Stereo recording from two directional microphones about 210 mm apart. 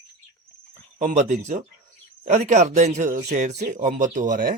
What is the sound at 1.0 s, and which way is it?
Speech, 35° right (ahead or behind).